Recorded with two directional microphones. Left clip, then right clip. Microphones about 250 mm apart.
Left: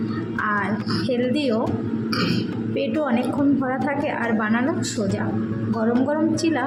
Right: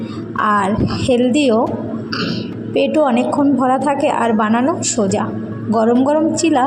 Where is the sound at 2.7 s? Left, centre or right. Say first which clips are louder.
Right 10 dB; right.